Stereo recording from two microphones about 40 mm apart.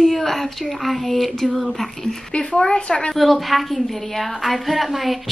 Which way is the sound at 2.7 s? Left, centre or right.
Left.